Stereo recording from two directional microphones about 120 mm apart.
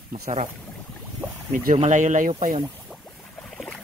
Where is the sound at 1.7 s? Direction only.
90° right.